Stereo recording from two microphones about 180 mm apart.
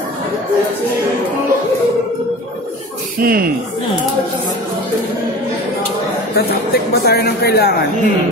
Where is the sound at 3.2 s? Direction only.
55° right (ahead or behind).